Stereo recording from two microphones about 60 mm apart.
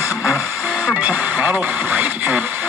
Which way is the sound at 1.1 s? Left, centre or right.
Right.